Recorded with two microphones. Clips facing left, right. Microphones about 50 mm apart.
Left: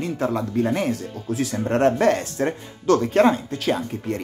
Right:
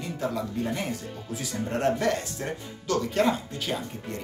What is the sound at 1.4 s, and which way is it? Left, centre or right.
Speech, left.